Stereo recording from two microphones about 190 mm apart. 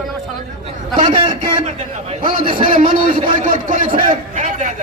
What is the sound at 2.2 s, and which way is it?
A man's voice, 45° right (ahead or behind).